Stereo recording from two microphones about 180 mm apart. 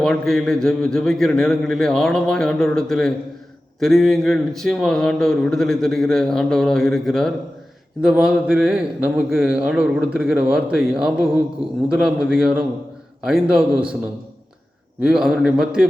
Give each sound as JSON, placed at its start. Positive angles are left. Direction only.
{"t": 0.0, "sound": "speech", "side_deg": 0}
{"t": 15.0, "sound": "speech", "side_deg": -5}